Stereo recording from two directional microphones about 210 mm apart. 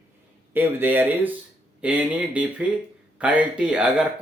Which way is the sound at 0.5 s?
10° right (ahead or behind).